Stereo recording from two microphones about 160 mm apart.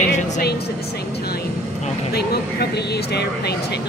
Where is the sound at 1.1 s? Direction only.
80° left.